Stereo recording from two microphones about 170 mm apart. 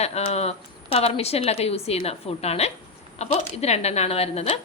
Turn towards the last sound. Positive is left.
turn(degrees=40)  # may be behind; listen again after turning